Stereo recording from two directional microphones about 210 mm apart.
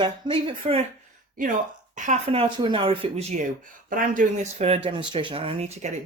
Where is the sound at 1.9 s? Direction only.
35° right (ahead or behind).